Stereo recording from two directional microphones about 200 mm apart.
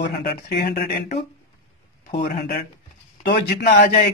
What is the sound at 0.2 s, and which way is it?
Speech, 55° left (ahead or behind).